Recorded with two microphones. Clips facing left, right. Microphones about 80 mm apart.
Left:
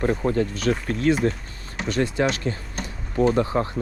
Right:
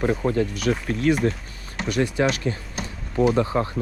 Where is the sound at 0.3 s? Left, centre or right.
Left.